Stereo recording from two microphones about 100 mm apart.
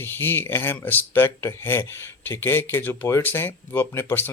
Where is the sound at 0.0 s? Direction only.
20° left (ahead or behind).